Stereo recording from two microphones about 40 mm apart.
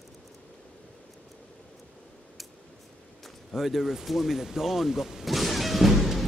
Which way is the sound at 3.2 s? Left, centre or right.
Centre.